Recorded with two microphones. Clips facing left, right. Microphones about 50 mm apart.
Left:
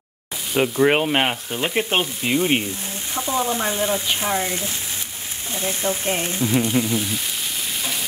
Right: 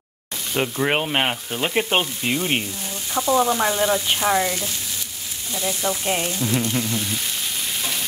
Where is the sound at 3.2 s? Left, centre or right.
Right.